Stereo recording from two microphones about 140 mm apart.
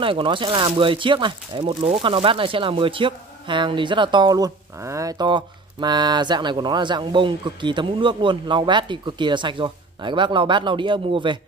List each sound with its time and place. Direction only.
0.0 s speech: 40° right (ahead or behind)